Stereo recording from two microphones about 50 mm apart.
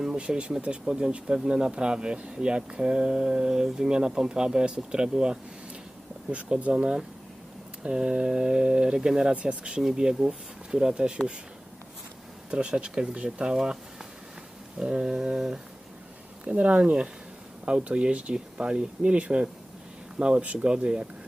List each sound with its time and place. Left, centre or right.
0.0 s speech: centre
6.3 s speech: right
9.3 s speech: right
12.5 s speech: centre
14.8 s speech: centre
16.4 s speech: right